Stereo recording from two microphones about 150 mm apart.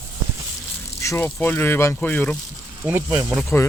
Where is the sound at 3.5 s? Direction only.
10° left (ahead or behind).